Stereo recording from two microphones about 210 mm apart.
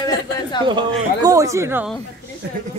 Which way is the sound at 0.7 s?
20° right (ahead or behind).